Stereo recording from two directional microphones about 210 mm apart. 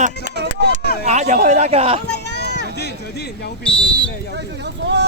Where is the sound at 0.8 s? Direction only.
50° left (ahead or behind).